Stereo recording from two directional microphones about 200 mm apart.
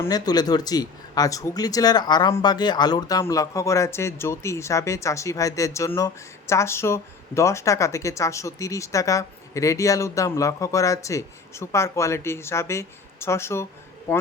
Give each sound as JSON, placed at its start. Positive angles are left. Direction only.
{"t": 0.0, "sound": "speech", "side_deg": 20}